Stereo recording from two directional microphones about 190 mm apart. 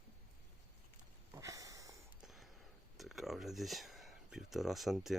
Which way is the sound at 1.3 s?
15° right (ahead or behind).